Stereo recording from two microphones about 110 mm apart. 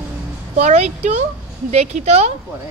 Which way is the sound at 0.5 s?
90° right.